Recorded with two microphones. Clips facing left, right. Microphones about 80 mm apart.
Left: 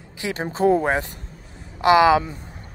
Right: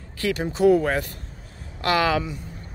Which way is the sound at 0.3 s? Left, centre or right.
Left.